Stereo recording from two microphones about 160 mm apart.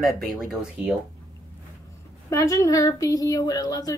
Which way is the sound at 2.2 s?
20° left (ahead or behind).